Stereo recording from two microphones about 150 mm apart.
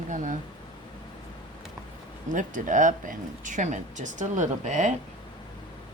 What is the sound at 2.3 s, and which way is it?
Speech, 60° right (ahead or behind).